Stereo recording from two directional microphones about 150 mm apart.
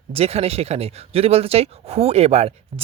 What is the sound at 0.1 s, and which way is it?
Speech, 40° right (ahead or behind).